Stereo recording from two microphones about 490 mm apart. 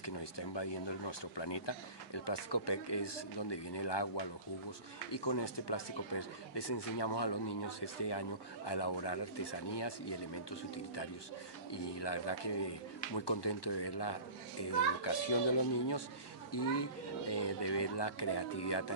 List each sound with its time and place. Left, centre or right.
0.0 s a child's voice: left